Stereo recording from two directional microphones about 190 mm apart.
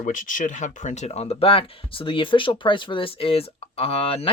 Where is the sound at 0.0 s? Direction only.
45° left (ahead or behind).